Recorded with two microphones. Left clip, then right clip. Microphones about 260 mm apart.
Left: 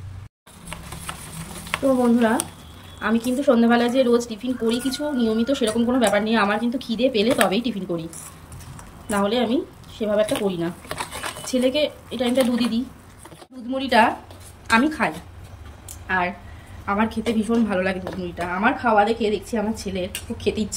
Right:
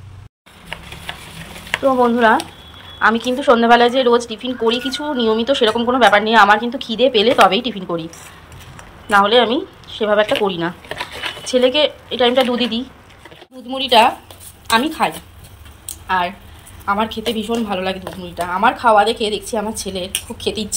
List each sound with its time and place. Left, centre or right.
1.7 s a woman's voice: centre
9.1 s a woman's voice: centre